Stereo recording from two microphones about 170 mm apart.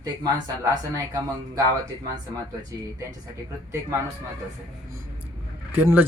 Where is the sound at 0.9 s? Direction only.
20° right (ahead or behind).